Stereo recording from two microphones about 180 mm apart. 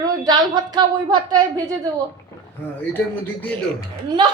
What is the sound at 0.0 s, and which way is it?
A woman's voice, 25° right (ahead or behind).